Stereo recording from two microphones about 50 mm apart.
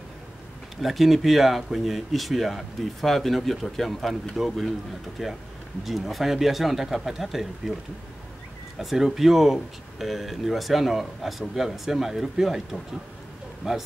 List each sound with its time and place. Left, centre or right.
0.7 s speech: centre
8.7 s speech: centre
13.6 s speech: centre